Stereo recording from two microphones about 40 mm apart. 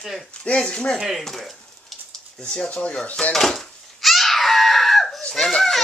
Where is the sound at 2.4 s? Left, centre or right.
Left.